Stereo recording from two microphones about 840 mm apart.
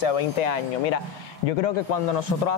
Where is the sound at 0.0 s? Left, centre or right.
Left.